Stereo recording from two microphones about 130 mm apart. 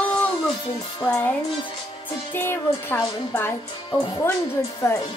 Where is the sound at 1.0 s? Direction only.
15° left (ahead or behind).